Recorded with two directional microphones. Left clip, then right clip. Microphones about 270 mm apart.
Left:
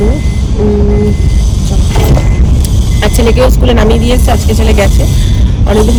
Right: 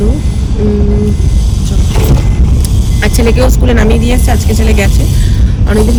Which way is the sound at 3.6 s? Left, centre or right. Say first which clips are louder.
Left 2 dB; centre.